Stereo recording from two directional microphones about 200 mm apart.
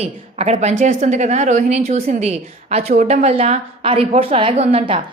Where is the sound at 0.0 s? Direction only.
30° right (ahead or behind).